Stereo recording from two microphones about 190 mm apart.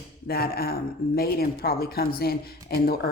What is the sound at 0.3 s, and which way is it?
A woman's voice, 55° left (ahead or behind).